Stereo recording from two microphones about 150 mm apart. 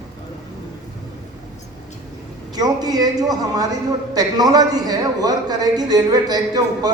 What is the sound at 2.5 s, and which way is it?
A man's voice, 25° right (ahead or behind).